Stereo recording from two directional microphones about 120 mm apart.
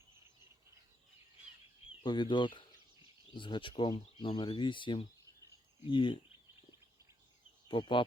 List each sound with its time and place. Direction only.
2.0 s speech: 40° left (ahead or behind)
7.7 s speech: 45° left (ahead or behind)